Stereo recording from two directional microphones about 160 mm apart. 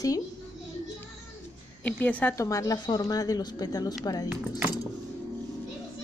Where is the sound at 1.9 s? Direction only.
10° left (ahead or behind).